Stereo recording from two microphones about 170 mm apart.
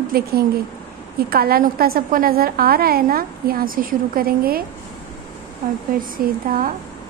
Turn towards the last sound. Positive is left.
turn(degrees=-55)  # may be behind; listen again after turning